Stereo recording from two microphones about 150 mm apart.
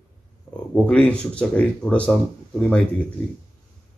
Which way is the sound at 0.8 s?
10° left (ahead or behind).